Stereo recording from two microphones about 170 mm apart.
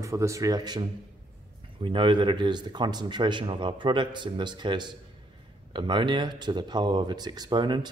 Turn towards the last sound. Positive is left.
turn(degrees=-25)  # may be behind; listen again after turning